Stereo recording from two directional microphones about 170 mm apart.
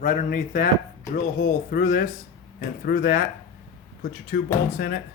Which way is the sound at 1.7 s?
60° left (ahead or behind).